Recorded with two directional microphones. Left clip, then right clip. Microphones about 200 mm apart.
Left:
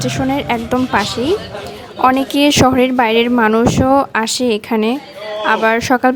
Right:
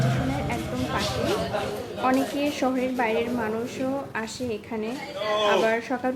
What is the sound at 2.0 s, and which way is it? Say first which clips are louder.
A woman's voice: left 12 dB; 50° left (ahead or behind).